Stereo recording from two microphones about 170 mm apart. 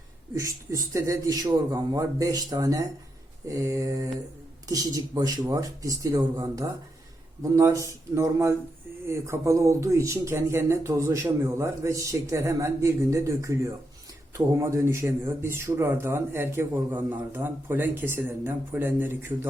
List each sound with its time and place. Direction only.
0.3 s speech: 20° right (ahead or behind)